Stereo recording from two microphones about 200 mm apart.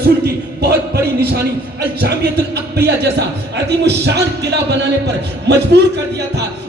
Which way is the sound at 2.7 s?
55° right (ahead or behind).